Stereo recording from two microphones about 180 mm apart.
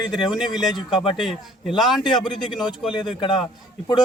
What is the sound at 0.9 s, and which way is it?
Speech, 25° left (ahead or behind).